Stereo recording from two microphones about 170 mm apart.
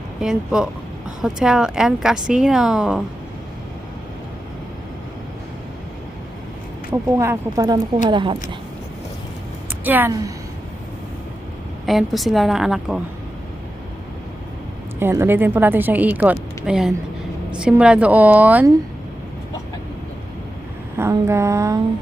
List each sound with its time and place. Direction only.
0.2 s speech: 5° right (ahead or behind)
6.9 s speech: 15° right (ahead or behind)
9.8 s a woman's voice: 10° right (ahead or behind)
11.9 s speech: centre (ahead or behind)
14.9 s a woman's voice: 15° right (ahead or behind)
21.0 s a woman's voice: 15° right (ahead or behind)